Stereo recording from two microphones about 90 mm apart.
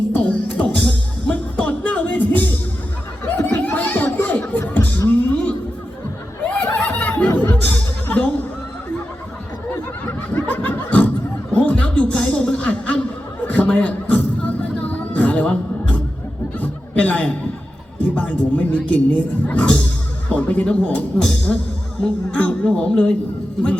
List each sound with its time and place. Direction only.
0.1 s music: 15° left (ahead or behind)
3.2 s chatter: 20° left (ahead or behind)
4.7 s music: 20° left (ahead or behind)
6.4 s a sound: 15° left (ahead or behind)
7.4 s music: 20° left (ahead or behind)
9.6 s snicker: 25° left (ahead or behind)
11.5 s a sound: 15° left (ahead or behind)
13.5 s music: 15° left (ahead or behind)
16.6 s chuckle: 15° left (ahead or behind)
18.0 s music: 15° left (ahead or behind)